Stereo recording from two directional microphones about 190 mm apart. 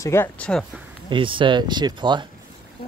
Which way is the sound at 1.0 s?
25° right (ahead or behind).